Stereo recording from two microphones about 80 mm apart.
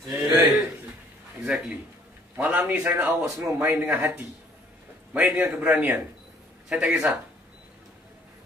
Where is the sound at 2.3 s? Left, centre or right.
Right.